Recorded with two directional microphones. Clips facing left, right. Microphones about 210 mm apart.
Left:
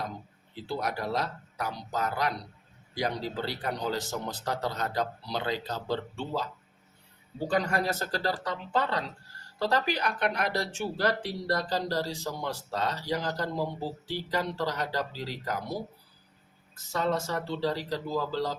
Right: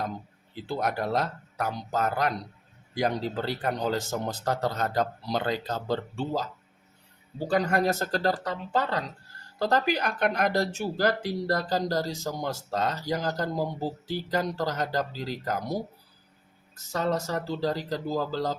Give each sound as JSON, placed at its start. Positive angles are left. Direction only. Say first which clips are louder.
{"t": 0.8, "sound": "speech", "louder": "right 4 dB", "side_deg": -50}
{"t": 16.9, "sound": "speech", "louder": "right 1 dB", "side_deg": -40}